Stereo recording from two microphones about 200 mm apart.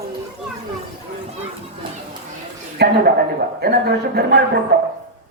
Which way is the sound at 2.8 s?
55° right (ahead or behind).